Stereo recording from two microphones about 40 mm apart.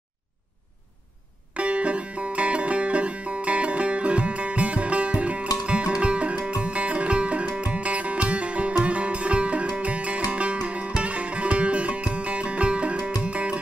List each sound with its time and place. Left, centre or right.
1.5 s music: right